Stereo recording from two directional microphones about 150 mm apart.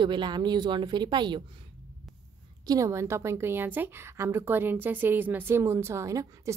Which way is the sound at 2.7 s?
20° right (ahead or behind).